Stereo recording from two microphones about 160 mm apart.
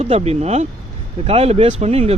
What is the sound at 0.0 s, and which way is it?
Speech, 45° right (ahead or behind).